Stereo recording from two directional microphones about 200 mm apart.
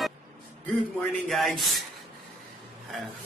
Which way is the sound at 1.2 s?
Centre (ahead or behind).